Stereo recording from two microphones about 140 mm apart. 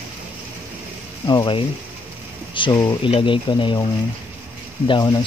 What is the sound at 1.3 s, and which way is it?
Speech, 35° left (ahead or behind).